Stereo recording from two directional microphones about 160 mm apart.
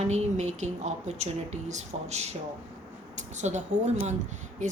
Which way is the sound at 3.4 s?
45° right (ahead or behind).